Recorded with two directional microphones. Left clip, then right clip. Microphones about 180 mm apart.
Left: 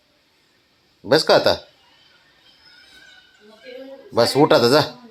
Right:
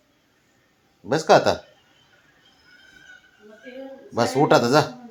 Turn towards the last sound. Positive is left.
turn(degrees=30)  # may be behind; listen again after turning